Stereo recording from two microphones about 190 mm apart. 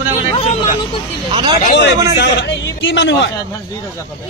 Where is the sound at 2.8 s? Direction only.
75° left (ahead or behind).